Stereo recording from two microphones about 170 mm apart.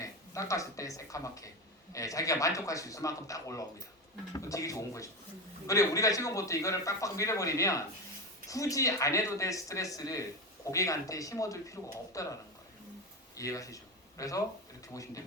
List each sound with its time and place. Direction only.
0.0 s a man's voice: 20° left (ahead or behind)